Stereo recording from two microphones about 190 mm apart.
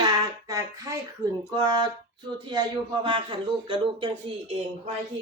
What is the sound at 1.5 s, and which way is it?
Speech, 20° right (ahead or behind).